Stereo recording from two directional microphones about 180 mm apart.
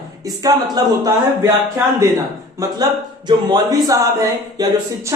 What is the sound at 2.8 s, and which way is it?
Speech, 20° right (ahead or behind).